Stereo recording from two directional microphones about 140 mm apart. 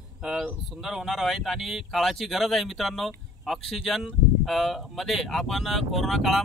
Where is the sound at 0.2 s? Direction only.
5° right (ahead or behind).